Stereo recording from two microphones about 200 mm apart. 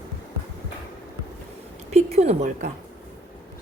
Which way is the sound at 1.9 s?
35° right (ahead or behind).